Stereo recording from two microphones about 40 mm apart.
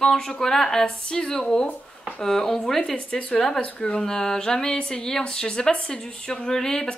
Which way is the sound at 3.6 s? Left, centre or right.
Left.